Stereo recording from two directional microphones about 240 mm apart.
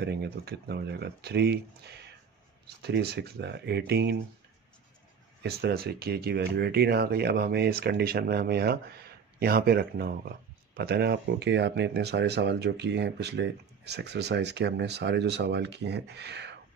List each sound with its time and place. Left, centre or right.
0.0 s speech: right
5.4 s speech: right